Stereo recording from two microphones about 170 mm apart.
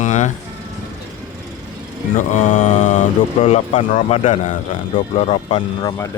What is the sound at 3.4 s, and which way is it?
Speech, 35° left (ahead or behind).